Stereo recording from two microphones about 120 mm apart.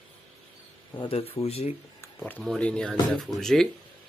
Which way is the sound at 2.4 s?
5° left (ahead or behind).